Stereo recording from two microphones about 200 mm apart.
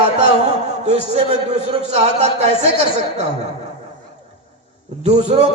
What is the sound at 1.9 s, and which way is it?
A man's voice, 35° right (ahead or behind).